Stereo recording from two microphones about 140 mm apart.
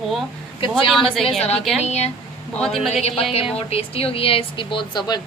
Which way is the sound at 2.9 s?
50° left (ahead or behind).